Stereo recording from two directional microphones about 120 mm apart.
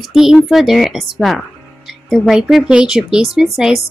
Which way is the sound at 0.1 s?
5° right (ahead or behind).